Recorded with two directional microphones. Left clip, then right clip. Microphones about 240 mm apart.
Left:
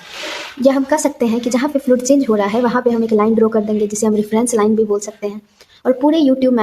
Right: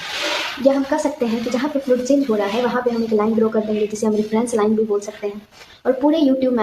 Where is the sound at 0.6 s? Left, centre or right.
Left.